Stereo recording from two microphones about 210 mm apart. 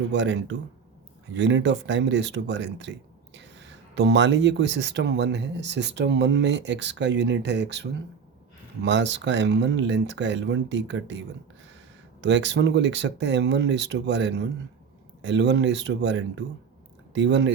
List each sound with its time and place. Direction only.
0.1 s speech: 55° right (ahead or behind)
12.2 s speech: 55° right (ahead or behind)